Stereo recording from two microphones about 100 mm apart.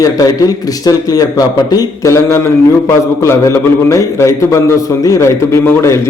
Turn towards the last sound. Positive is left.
turn(degrees=25)  # may be behind; listen again after turning